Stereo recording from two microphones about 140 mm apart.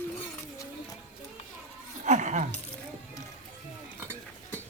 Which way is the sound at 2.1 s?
60° right (ahead or behind).